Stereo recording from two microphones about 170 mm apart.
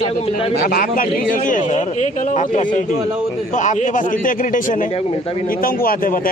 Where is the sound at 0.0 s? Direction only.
35° left (ahead or behind).